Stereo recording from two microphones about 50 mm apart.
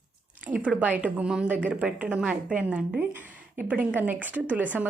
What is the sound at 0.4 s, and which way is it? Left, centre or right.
A woman's voice, right.